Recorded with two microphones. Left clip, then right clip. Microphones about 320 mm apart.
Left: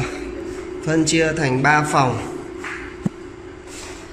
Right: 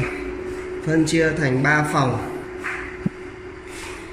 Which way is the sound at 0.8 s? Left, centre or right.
Centre.